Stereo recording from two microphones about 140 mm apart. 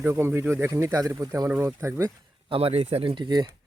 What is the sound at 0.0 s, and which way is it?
Speech, 20° right (ahead or behind).